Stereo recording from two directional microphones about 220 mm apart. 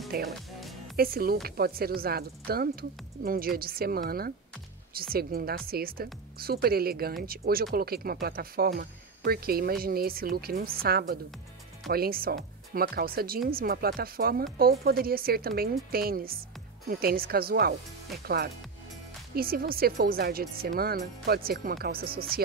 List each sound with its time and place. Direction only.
0.1 s speech: 45° right (ahead or behind)
0.6 s music: centre (ahead or behind)
0.9 s speech: 45° right (ahead or behind)